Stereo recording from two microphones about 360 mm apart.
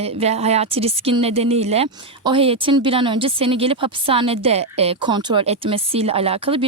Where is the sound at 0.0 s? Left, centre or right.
Centre.